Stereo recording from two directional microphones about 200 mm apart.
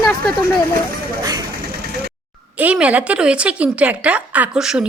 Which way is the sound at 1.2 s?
20° right (ahead or behind).